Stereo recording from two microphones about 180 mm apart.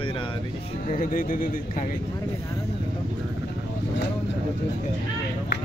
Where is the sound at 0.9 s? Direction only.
50° left (ahead or behind).